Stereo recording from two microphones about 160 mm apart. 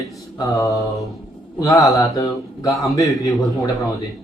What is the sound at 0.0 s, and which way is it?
Mantra, 20° left (ahead or behind).